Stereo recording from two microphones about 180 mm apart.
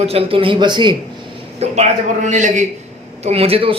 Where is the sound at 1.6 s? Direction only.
40° right (ahead or behind).